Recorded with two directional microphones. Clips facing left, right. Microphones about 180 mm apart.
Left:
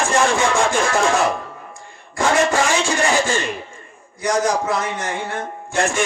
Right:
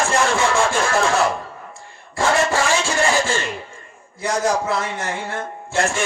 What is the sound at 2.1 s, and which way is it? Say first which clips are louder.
A man's voice: left 1 dB; 20° left (ahead or behind).